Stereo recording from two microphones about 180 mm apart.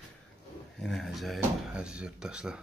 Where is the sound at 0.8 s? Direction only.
Centre (ahead or behind).